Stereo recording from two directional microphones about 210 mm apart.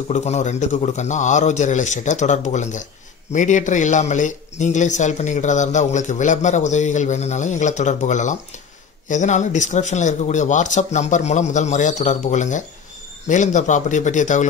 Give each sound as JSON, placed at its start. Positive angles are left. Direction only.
{"t": 0.1, "sound": "a man's voice", "side_deg": 35}